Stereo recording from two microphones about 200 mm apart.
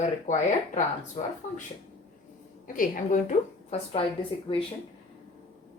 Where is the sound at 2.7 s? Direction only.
40° left (ahead or behind).